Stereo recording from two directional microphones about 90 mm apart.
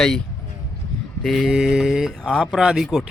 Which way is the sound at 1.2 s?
Centre (ahead or behind).